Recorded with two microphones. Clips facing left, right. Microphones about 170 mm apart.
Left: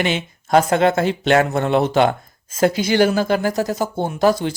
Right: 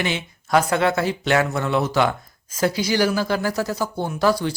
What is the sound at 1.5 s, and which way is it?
Speech, 55° left (ahead or behind).